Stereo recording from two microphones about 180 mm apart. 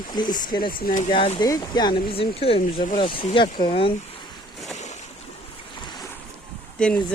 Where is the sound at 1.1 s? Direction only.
30° left (ahead or behind).